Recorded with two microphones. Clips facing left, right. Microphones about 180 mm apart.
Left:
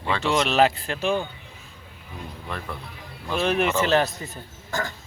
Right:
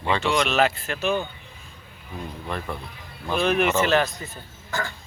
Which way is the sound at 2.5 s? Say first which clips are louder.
Right 3 dB; centre (ahead or behind).